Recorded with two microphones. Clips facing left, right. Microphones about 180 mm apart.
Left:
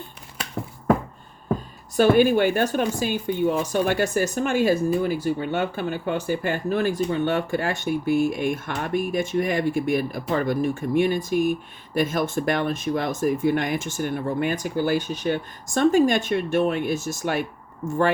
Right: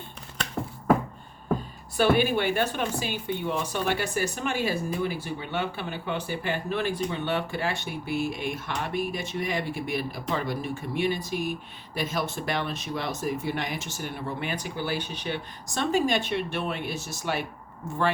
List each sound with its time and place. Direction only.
2.0 s speech: 45° left (ahead or behind)